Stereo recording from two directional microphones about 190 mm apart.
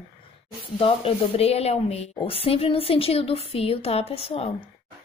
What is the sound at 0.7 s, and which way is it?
A woman's voice, 30° left (ahead or behind).